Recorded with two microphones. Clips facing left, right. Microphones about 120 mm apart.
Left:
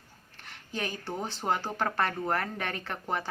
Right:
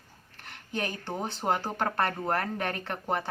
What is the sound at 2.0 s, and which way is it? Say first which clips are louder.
A woman's voice: right 1 dB; 50° right (ahead or behind).